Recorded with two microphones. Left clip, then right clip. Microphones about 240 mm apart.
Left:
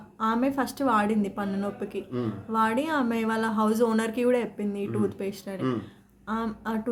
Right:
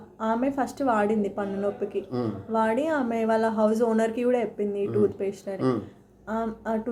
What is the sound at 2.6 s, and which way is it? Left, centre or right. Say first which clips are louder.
A woman's voice: right 1 dB; left.